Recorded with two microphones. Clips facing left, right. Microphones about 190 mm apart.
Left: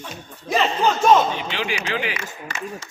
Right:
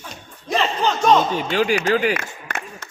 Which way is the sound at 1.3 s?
45° right (ahead or behind).